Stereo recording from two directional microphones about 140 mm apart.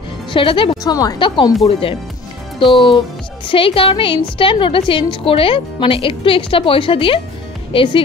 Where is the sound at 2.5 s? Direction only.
35° left (ahead or behind).